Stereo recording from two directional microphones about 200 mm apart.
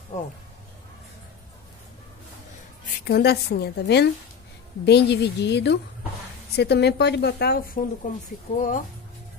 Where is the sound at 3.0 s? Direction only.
55° left (ahead or behind).